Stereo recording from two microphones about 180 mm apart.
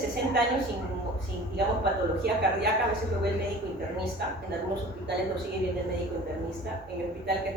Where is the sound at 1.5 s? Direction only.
65° right (ahead or behind).